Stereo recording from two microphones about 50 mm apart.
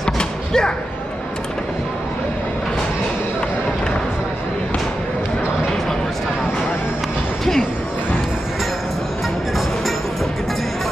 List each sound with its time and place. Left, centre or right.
0.0 s slam: centre